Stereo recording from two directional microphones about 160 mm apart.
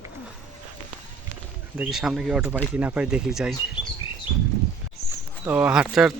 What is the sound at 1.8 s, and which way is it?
Speech, 5° right (ahead or behind).